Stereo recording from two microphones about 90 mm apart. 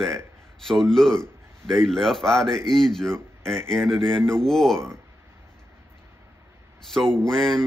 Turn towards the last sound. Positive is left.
turn(degrees=5)  # may be behind; listen again after turning